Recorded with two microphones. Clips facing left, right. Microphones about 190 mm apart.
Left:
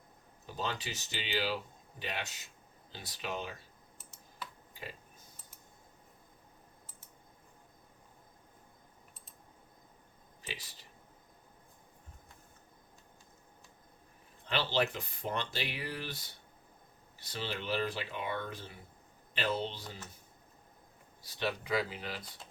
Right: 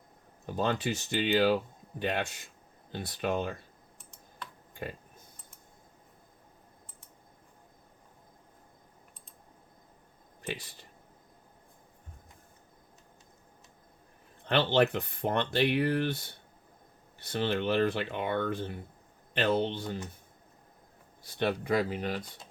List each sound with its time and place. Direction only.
0.4 s speech: 55° right (ahead or behind)
3.9 s computer keyboard: 5° left (ahead or behind)
4.7 s typing: 55° right (ahead or behind)
10.4 s speech: 55° right (ahead or behind)
14.4 s speech: 60° right (ahead or behind)
21.2 s speech: 55° right (ahead or behind)